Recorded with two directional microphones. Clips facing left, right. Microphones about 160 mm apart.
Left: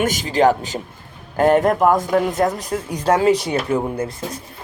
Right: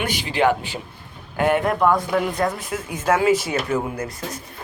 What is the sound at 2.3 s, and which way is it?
Speech, 20° left (ahead or behind).